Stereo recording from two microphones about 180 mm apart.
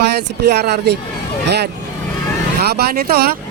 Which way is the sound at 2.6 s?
60° right (ahead or behind).